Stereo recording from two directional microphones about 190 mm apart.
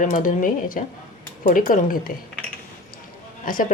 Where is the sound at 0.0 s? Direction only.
45° left (ahead or behind).